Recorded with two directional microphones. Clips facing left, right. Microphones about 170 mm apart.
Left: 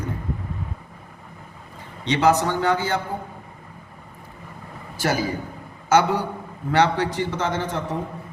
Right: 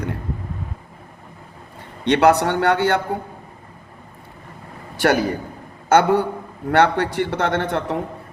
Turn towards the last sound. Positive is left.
turn(degrees=-65)  # may be behind; listen again after turning